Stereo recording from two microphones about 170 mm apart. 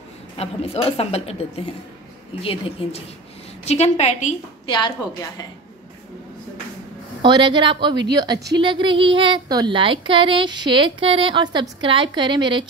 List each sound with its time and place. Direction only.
0.4 s a woman's voice: 35° left (ahead or behind)
2.4 s a woman's voice: 35° left (ahead or behind)
4.6 s a woman's voice: 30° left (ahead or behind)
7.2 s speech: 30° right (ahead or behind)